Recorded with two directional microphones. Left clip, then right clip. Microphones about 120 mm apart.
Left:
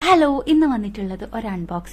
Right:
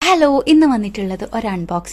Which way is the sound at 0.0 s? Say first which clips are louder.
Right 3 dB; 45° right (ahead or behind).